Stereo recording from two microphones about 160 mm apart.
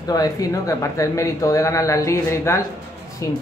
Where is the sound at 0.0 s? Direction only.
25° left (ahead or behind).